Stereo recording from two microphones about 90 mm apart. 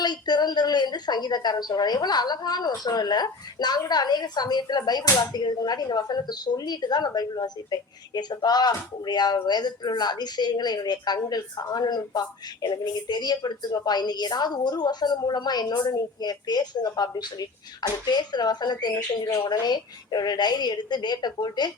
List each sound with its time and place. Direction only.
0.0 s a woman's voice: 50° left (ahead or behind)